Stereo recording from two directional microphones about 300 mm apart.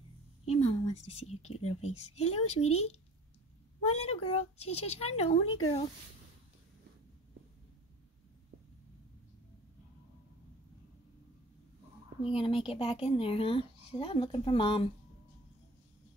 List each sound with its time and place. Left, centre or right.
0.5 s a sound: left
1.6 s speech: left
12.2 s speech: centre